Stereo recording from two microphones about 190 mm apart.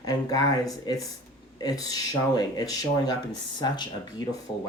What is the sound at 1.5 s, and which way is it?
Speech, 20° left (ahead or behind).